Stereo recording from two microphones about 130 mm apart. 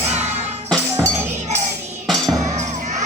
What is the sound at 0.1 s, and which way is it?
Music, 55° right (ahead or behind).